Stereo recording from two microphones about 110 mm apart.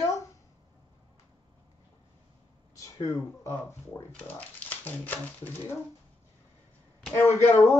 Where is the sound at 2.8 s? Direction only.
30° left (ahead or behind).